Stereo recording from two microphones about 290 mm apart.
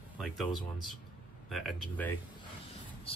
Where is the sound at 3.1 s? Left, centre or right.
Centre.